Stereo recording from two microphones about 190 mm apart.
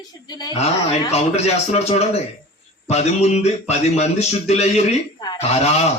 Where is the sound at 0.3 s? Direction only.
20° left (ahead or behind).